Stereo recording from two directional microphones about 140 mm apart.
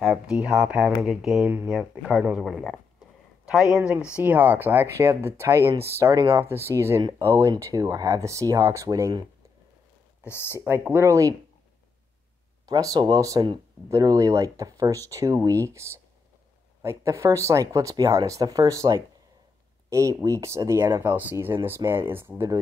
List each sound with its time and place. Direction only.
0.0 s speech: 5° right (ahead or behind)
3.7 s speech: 5° right (ahead or behind)
10.2 s speech: 15° left (ahead or behind)
10.6 s speech: 15° right (ahead or behind)
12.6 s speech: 25° right (ahead or behind)